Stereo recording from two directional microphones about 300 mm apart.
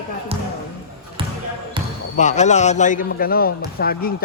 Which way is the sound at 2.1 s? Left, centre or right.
Left.